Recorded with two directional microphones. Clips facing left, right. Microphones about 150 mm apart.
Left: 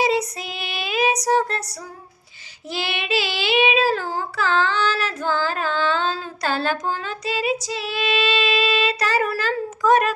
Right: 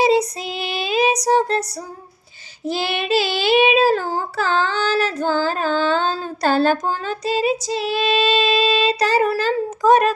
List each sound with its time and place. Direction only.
0.0 s child singing: 30° right (ahead or behind)
2.6 s child singing: 40° right (ahead or behind)